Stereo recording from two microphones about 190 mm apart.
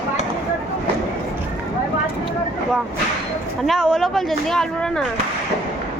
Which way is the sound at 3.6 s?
Centre (ahead or behind).